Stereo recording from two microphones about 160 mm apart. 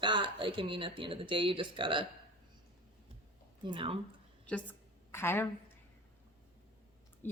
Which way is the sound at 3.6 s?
30° right (ahead or behind).